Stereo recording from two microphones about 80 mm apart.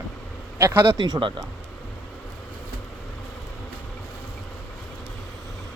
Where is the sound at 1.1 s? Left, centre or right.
Right.